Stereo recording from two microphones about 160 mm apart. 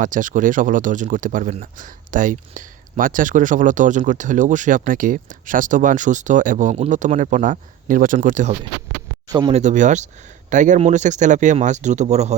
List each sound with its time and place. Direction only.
0.0 s speech: 55° right (ahead or behind)